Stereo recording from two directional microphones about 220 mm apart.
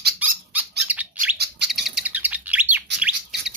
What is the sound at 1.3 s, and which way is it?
Bird, 50° right (ahead or behind).